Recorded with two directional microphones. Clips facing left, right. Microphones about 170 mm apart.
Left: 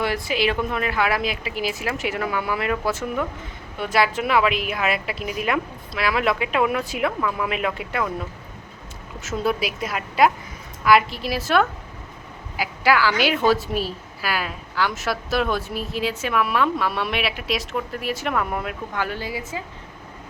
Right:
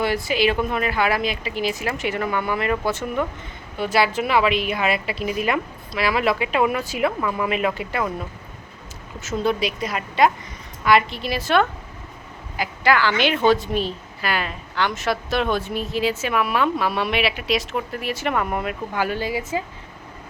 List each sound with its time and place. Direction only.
0.0 s a woman's voice: centre (ahead or behind)
9.2 s a woman's voice: 5° left (ahead or behind)
19.0 s a woman's voice: 15° right (ahead or behind)